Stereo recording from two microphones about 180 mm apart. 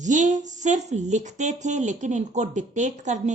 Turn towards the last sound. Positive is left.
turn(degrees=-40)  # may be behind; listen again after turning